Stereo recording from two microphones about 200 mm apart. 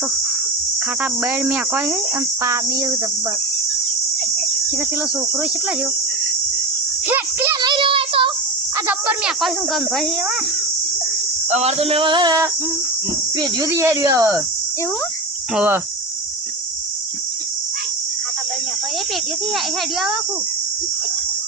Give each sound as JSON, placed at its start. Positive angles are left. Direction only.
{"t": 1.2, "sound": "speech", "side_deg": -10}
{"t": 7.6, "sound": "male singing", "side_deg": -25}
{"t": 8.9, "sound": "speech", "side_deg": -5}
{"t": 11.5, "sound": "male singing", "side_deg": -30}
{"t": 13.4, "sound": "speech", "side_deg": -15}
{"t": 15.5, "sound": "speech", "side_deg": -10}